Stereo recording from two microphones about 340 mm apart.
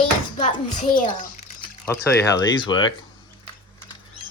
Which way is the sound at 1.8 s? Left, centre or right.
Centre.